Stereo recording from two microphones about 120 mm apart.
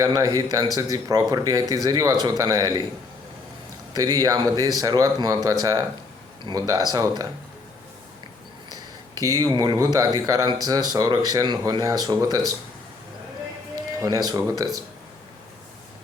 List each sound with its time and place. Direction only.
0.0 s speech: 30° right (ahead or behind)
3.9 s speech: 35° right (ahead or behind)
8.7 s speech: 30° right (ahead or behind)
14.0 s speech: 30° right (ahead or behind)